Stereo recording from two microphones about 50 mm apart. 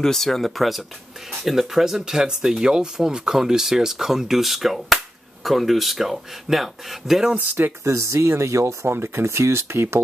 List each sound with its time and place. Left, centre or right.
0.0 s speech: centre
7.8 s speech: right
8.8 s speech: right